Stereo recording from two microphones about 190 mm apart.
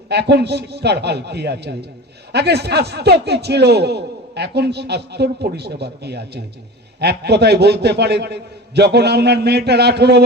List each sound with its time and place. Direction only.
0.1 s a man's voice: 60° right (ahead or behind)